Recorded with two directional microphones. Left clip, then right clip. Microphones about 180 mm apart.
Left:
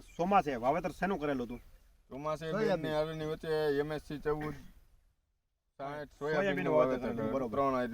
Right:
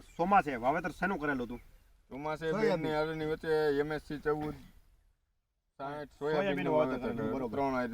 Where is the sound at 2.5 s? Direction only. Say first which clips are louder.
Right 2 dB; 35° right (ahead or behind).